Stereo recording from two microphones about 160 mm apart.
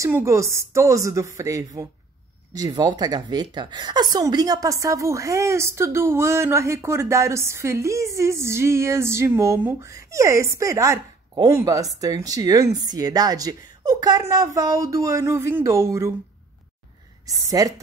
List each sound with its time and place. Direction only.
0.0 s a woman's voice: 20° right (ahead or behind)
17.5 s speech: 20° right (ahead or behind)